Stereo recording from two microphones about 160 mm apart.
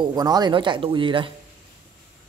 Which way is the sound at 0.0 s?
25° right (ahead or behind).